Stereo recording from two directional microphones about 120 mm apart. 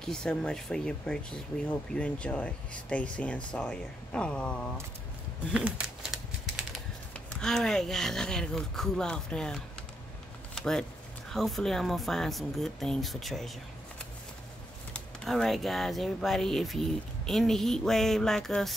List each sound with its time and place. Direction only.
0.0 s speech: 5° left (ahead or behind)
5.5 s a sound: 5° right (ahead or behind)
7.3 s speech: 5° left (ahead or behind)
14.9 s speech: 5° left (ahead or behind)